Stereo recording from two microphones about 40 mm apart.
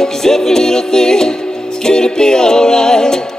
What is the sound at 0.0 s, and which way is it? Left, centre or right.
Music, centre.